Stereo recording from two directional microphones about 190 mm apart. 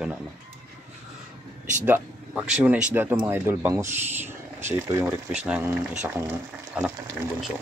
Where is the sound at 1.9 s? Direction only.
5° right (ahead or behind).